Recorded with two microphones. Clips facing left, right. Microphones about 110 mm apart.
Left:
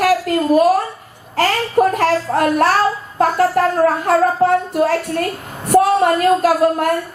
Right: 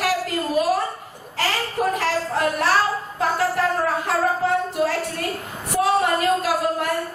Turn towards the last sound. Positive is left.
turn(degrees=50)  # may be behind; listen again after turning